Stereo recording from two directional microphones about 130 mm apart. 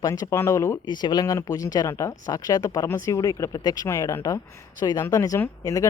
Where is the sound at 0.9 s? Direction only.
35° left (ahead or behind).